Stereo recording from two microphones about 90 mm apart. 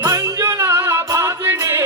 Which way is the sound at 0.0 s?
35° right (ahead or behind).